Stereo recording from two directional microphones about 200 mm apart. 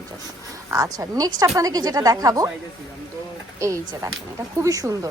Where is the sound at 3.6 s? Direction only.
15° right (ahead or behind).